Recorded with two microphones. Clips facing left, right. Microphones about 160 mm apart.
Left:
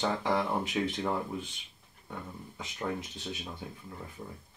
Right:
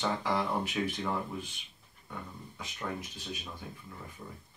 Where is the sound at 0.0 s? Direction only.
20° left (ahead or behind).